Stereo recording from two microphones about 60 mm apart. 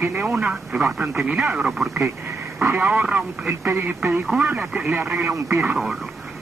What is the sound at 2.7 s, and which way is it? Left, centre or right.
Speech, right.